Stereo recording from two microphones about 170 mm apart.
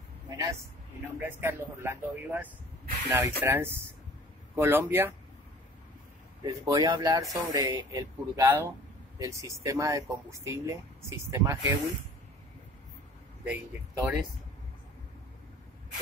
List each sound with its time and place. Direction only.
1.0 s speech: 15° right (ahead or behind)
6.4 s speech: 20° right (ahead or behind)
13.5 s speech: 10° right (ahead or behind)